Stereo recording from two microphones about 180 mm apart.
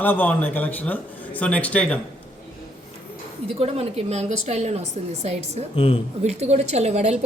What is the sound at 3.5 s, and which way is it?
A woman's voice, 35° right (ahead or behind).